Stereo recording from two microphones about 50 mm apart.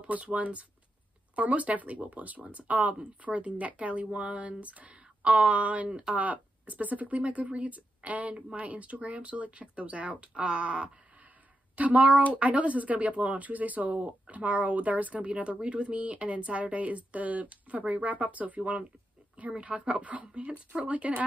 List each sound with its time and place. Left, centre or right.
0.0 s speech: right